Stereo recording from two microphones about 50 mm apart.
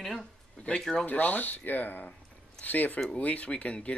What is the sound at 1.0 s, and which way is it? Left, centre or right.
Speech, left.